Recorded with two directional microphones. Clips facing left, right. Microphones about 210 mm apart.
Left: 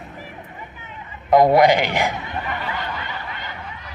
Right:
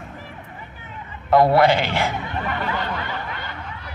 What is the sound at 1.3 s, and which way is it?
Speech, 15° left (ahead or behind).